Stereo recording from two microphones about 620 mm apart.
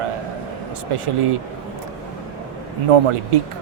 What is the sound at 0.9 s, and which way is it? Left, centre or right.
Speech, right.